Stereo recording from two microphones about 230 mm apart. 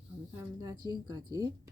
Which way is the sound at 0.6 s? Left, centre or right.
Centre.